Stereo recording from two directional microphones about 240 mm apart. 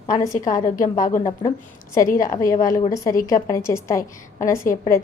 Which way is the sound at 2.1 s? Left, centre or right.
Left.